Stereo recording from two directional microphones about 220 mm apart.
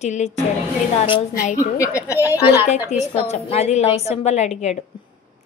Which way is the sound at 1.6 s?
15° left (ahead or behind).